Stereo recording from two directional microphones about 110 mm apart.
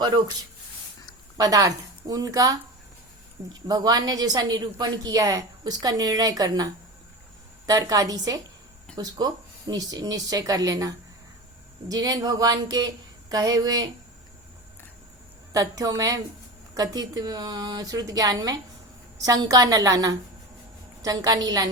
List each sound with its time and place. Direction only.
1.4 s a woman's voice: 35° right (ahead or behind)
3.7 s a woman's voice: 35° right (ahead or behind)
7.7 s a woman's voice: 35° right (ahead or behind)
15.5 s a woman's voice: 35° right (ahead or behind)